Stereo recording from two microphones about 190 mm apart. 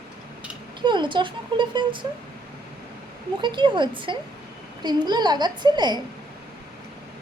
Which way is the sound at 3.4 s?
25° right (ahead or behind).